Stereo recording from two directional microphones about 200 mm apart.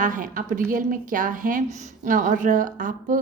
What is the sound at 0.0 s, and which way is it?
A woman's voice, 40° right (ahead or behind).